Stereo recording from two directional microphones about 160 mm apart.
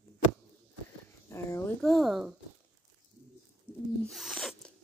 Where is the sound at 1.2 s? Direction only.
15° left (ahead or behind).